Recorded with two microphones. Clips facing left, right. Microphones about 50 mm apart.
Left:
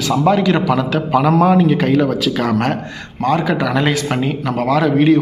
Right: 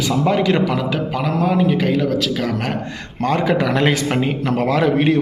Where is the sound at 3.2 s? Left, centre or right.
Right.